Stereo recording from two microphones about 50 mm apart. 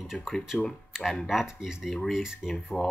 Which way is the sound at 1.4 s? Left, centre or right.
Centre.